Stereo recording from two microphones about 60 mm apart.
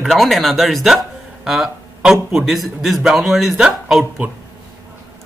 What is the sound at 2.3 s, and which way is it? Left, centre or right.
Speech, centre.